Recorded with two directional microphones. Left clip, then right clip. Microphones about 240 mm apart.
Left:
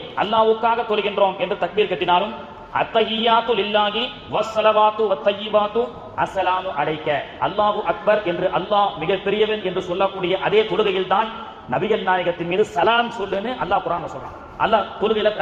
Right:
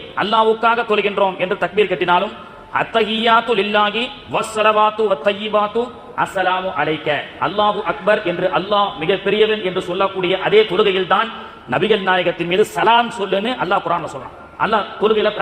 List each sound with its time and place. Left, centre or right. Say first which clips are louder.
0.2 s a man's voice: right 2 dB; right